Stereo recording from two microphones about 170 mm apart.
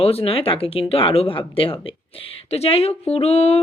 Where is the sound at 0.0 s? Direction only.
35° left (ahead or behind).